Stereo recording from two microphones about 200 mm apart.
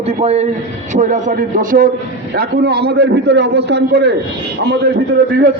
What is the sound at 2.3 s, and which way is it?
A man's voice, 55° right (ahead or behind).